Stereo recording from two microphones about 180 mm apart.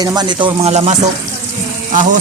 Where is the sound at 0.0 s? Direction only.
25° right (ahead or behind).